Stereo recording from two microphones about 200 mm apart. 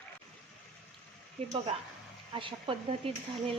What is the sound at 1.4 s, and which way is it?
Speech, 30° right (ahead or behind).